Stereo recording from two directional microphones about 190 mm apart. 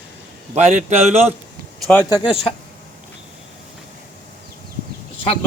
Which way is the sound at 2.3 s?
30° left (ahead or behind).